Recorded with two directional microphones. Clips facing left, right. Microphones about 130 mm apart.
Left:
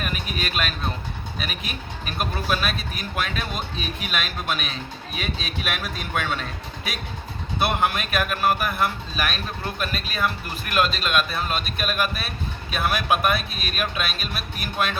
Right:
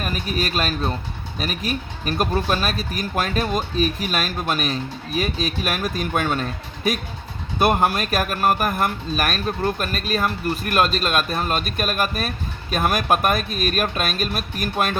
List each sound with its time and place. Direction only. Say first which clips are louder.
0.0 s speech: right 4 dB; 40° right (ahead or behind)
7.6 s speech: right 5 dB; 40° right (ahead or behind)